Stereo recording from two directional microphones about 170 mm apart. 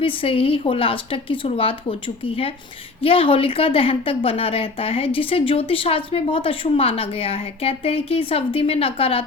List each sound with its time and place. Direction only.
0.0 s a woman's voice: 35° left (ahead or behind)